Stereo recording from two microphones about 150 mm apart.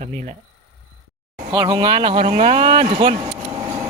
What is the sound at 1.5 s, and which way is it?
Speech, 25° right (ahead or behind).